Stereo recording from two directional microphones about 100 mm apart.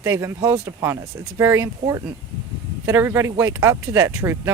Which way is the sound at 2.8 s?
25° right (ahead or behind).